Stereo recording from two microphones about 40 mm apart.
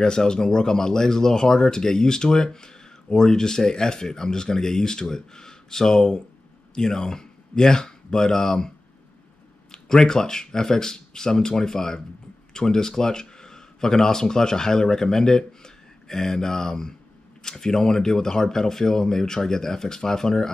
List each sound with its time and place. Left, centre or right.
0.0 s speech: centre